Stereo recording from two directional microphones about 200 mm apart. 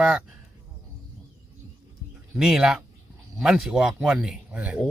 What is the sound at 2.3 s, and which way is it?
Speech, 5° right (ahead or behind).